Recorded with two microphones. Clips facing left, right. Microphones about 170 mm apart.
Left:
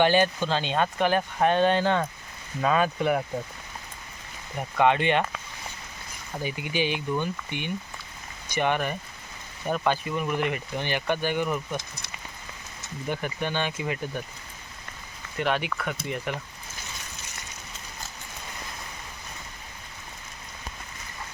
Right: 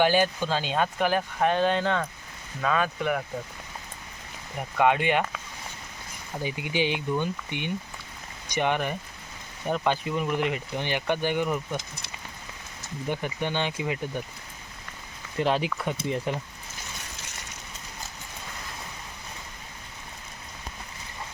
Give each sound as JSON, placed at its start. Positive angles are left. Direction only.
{"t": 0.0, "sound": "speech", "side_deg": -5}
{"t": 2.8, "sound": "speech", "side_deg": 35}
{"t": 4.8, "sound": "speech", "side_deg": -5}
{"t": 6.4, "sound": "speech", "side_deg": -15}
{"t": 13.1, "sound": "speech", "side_deg": -20}
{"t": 15.4, "sound": "speech", "side_deg": -30}